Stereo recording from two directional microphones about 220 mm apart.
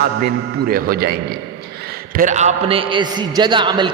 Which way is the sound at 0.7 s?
45° right (ahead or behind).